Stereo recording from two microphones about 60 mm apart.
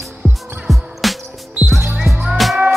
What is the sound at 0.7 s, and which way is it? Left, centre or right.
Music, centre.